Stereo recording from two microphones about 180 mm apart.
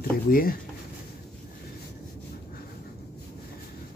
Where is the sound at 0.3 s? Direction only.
55° left (ahead or behind).